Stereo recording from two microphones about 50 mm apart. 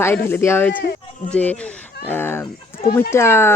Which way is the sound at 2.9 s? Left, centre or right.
Left.